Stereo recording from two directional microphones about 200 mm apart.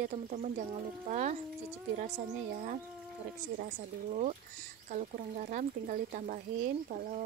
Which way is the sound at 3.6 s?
35° right (ahead or behind).